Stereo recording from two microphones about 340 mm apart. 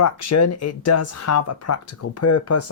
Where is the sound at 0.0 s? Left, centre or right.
Left.